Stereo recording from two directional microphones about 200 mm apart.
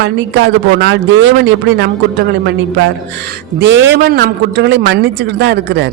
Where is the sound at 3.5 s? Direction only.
60° right (ahead or behind).